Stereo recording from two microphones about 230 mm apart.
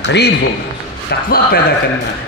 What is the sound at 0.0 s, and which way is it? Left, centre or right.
Speech, left.